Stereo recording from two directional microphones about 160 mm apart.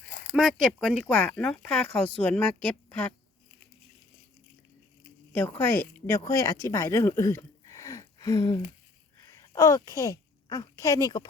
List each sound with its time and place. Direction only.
0.3 s speech: centre (ahead or behind)
5.3 s speech: 10° left (ahead or behind)
9.2 s a sound: 20° left (ahead or behind)
9.5 s speech: 20° left (ahead or behind)